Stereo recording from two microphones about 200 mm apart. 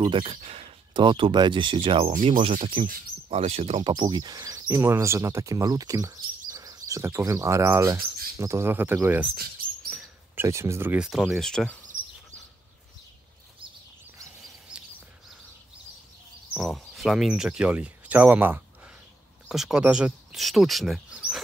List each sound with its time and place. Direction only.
0.0 s speech: 25° right (ahead or behind); by 11.8 s 5° left (ahead or behind)
16.5 s speech: centre (ahead or behind)